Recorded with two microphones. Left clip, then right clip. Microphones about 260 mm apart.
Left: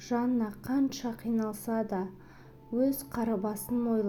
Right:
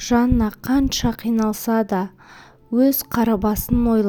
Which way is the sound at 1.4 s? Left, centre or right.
Right.